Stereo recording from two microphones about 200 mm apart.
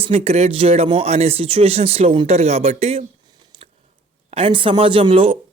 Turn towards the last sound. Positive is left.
turn(degrees=-25)  # may be behind; listen again after turning